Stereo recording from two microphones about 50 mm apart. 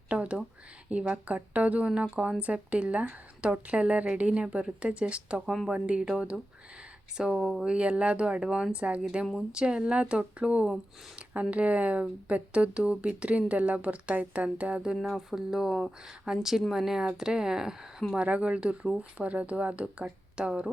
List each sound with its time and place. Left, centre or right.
0.1 s speech: right
7.6 s speech: right
14.9 s speech: centre
18.1 s speech: right